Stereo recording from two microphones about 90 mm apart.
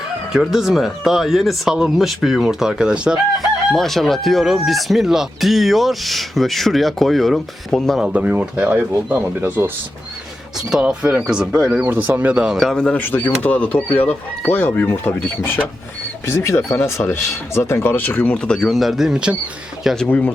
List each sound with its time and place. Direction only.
0.3 s speech: centre (ahead or behind)
3.8 s speech: centre (ahead or behind)
8.0 s speech: 15° right (ahead or behind)
10.6 s speech: 5° right (ahead or behind)
11.9 s speech: 20° right (ahead or behind)
12.5 s a man's voice: 5° left (ahead or behind)
16.2 s speech: 30° left (ahead or behind); by 19.4 s 10° right (ahead or behind)
20.1 s a man's voice: 20° left (ahead or behind)